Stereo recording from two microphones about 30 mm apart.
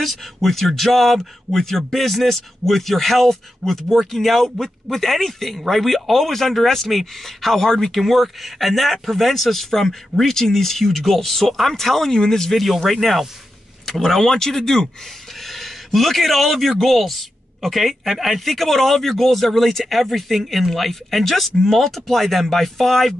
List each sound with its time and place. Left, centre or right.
0.0 s a man's voice: centre
12.1 s a man's voice: centre
12.5 s a man's voice: centre
15.4 s a sound: centre
16.8 s speech: centre